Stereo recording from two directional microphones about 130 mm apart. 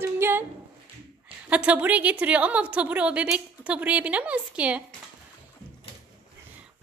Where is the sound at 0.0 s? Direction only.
15° right (ahead or behind).